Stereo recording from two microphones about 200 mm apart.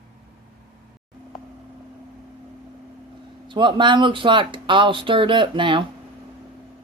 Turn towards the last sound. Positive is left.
turn(degrees=-25)  # may be behind; listen again after turning